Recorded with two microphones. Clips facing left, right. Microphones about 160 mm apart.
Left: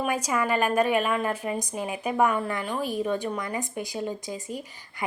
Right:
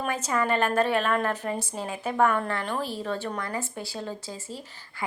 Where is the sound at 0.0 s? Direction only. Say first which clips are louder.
Left 1 dB; 10° left (ahead or behind).